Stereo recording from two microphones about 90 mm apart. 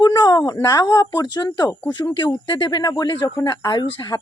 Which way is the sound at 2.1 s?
60° left (ahead or behind).